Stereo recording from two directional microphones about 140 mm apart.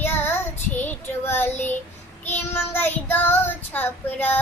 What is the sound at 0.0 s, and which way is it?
Child singing, 15° left (ahead or behind).